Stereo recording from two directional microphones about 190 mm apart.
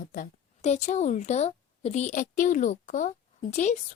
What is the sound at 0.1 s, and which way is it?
A woman's voice, 40° left (ahead or behind).